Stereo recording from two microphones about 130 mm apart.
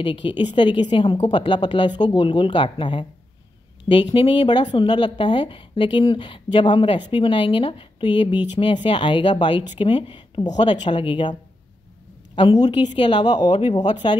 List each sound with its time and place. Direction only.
0.0 s speech: 40° left (ahead or behind)
12.5 s speech: 35° left (ahead or behind)